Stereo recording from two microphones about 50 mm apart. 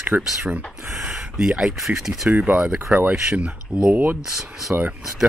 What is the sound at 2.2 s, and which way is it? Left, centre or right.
Speech, right.